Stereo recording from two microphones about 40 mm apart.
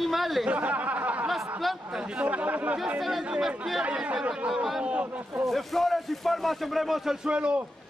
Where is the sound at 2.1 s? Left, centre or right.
Right.